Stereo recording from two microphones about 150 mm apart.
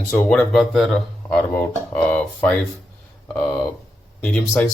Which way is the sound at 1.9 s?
10° left (ahead or behind).